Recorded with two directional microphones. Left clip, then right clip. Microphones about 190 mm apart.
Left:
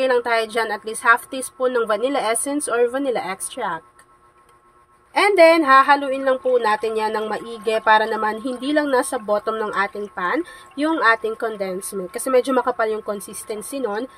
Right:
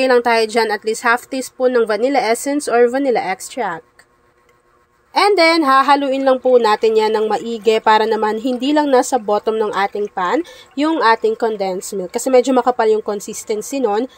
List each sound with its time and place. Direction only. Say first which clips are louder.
0.0 s speech: right 5 dB; 30° right (ahead or behind)
5.1 s speech: right 1 dB; 25° right (ahead or behind)